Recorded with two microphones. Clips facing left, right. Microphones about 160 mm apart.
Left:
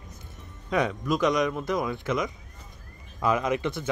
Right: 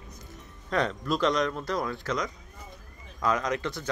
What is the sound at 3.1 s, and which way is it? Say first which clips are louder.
Speech: left 3 dB; 10° left (ahead or behind).